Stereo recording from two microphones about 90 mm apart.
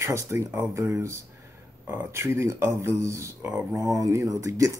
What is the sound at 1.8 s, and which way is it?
Speech, 20° right (ahead or behind).